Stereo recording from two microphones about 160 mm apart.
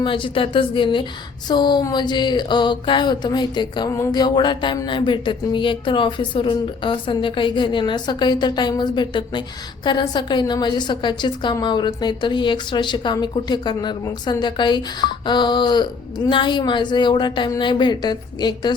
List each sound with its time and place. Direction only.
0.0 s a woman's voice: 30° left (ahead or behind)